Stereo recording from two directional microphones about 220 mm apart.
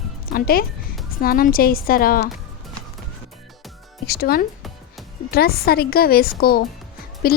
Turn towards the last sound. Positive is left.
turn(degrees=45)  # may be behind; listen again after turning